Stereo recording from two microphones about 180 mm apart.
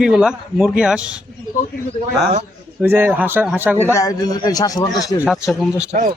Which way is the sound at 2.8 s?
10° right (ahead or behind).